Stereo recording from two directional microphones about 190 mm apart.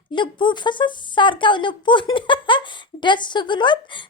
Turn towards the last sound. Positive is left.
turn(degrees=25)  # may be behind; listen again after turning